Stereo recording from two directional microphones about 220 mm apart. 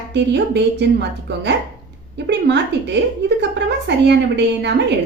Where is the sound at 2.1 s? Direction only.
50° right (ahead or behind).